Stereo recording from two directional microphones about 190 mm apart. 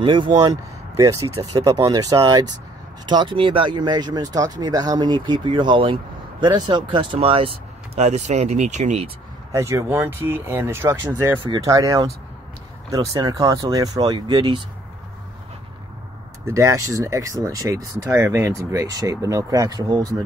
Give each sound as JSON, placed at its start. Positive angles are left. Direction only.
{"t": 0.0, "sound": "speech", "side_deg": -25}
{"t": 9.5, "sound": "speech", "side_deg": -15}
{"t": 11.3, "sound": "speech", "side_deg": -25}
{"t": 16.4, "sound": "speech", "side_deg": -15}